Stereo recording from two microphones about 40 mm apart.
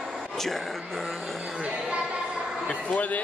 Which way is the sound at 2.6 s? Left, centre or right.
Left.